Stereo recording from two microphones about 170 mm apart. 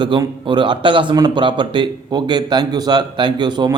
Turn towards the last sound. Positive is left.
turn(degrees=-25)  # may be behind; listen again after turning